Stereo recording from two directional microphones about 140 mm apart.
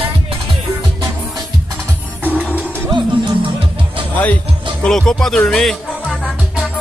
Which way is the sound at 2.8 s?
35° right (ahead or behind).